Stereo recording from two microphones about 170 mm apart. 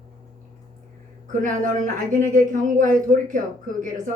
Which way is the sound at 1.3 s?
50° right (ahead or behind).